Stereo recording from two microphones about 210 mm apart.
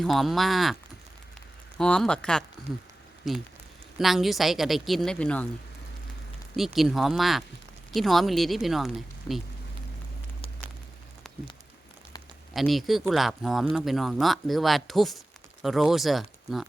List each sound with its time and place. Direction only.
0.0 s speech: centre (ahead or behind)
1.8 s speech: 5° left (ahead or behind)
6.6 s speech: centre (ahead or behind)
9.3 s speech: 15° left (ahead or behind)
12.5 s speech: centre (ahead or behind)